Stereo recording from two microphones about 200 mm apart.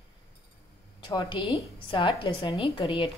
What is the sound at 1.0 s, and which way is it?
A woman's voice, 20° left (ahead or behind).